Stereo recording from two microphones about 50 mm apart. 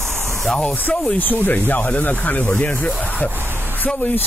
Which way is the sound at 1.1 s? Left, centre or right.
Left.